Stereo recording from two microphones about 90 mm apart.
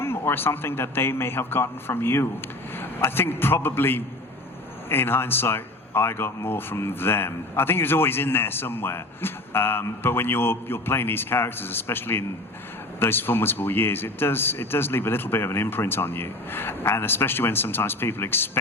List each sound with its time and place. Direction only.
0.0 s speech: 25° left (ahead or behind)